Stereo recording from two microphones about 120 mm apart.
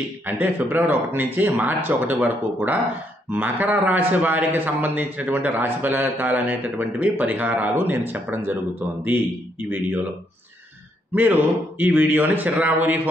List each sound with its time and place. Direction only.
0.3 s a man's voice: 15° right (ahead or behind)
11.1 s a man's voice: 15° right (ahead or behind)